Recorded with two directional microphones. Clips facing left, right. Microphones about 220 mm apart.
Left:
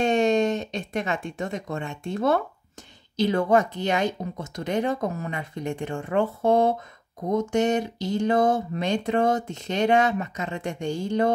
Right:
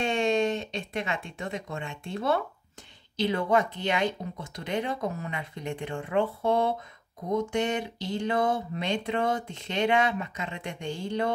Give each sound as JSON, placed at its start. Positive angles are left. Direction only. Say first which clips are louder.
{"t": 0.0, "sound": "speech", "louder": "left 5 dB", "side_deg": 45}